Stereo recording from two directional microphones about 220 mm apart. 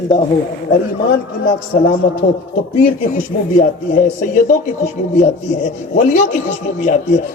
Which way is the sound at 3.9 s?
35° left (ahead or behind).